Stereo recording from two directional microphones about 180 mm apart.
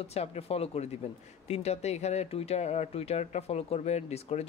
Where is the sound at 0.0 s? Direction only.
35° left (ahead or behind).